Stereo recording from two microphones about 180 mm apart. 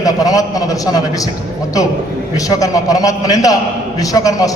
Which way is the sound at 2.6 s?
20° left (ahead or behind).